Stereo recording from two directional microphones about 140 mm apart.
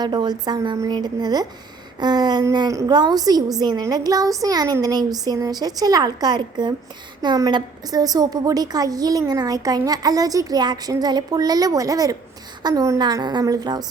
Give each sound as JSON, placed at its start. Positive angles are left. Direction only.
{"t": 0.0, "sound": "a woman's voice", "side_deg": -30}